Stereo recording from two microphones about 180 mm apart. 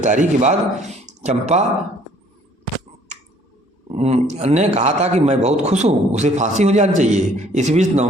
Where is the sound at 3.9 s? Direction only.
35° right (ahead or behind).